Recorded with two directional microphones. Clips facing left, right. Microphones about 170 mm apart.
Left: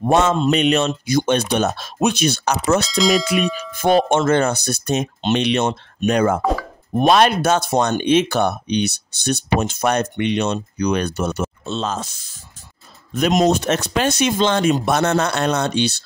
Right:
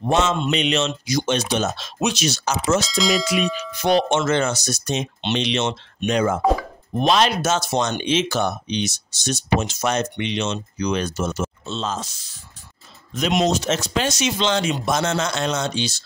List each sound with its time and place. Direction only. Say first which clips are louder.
0.5 s speech: left 5 dB; 50° left (ahead or behind)
2.9 s speech: left 3 dB; centre (ahead or behind)
3.8 s speech: left 3 dB; 50° left (ahead or behind)